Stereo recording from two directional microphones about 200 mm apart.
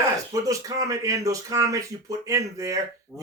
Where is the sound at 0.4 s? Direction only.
15° right (ahead or behind).